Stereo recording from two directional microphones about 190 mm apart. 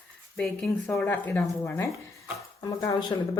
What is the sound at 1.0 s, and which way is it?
A woman's voice, 10° left (ahead or behind).